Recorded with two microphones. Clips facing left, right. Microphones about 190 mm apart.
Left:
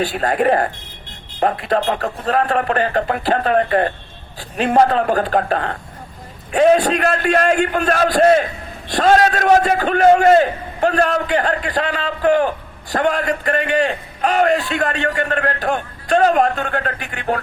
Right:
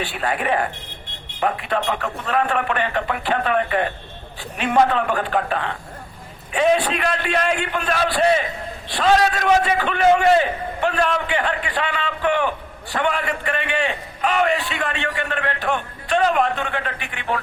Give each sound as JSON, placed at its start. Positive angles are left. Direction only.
{"t": 0.0, "sound": "a man's voice", "side_deg": 40}